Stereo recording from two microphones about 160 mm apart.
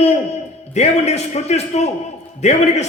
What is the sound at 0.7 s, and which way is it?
A man's voice, 45° left (ahead or behind).